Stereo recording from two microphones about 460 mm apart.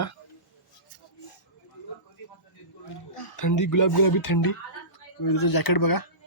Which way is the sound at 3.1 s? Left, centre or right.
Left.